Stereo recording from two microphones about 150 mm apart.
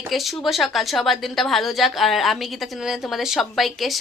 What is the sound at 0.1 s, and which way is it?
A woman's voice, centre (ahead or behind).